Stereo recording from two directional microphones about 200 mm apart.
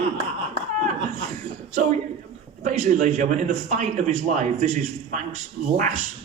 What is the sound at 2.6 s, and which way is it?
Speech, 40° right (ahead or behind).